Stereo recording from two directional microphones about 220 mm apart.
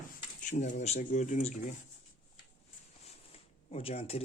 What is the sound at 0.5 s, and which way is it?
Speech, 35° left (ahead or behind).